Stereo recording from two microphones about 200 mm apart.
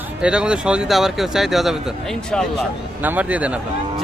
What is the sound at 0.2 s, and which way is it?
Speech, 5° right (ahead or behind).